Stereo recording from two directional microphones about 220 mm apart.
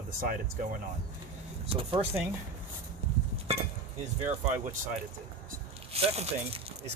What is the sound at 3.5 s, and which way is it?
Speech, 25° right (ahead or behind).